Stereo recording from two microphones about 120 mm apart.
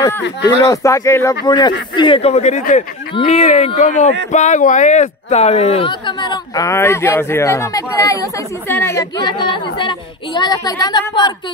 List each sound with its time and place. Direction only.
0.7 s speech: 25° left (ahead or behind)
1.4 s a woman's voice: 35° left (ahead or behind)
2.3 s speech: 75° left (ahead or behind)
3.3 s speech: 65° left (ahead or behind)
5.9 s speech: 40° left (ahead or behind); by 9.0 s 20° left (ahead or behind)
9.1 s a woman's voice: 35° left (ahead or behind)